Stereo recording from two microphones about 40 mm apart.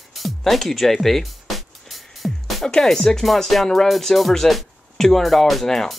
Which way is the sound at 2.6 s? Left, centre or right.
Centre.